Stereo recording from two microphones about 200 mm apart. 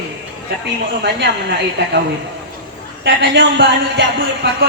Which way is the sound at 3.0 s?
60° right (ahead or behind).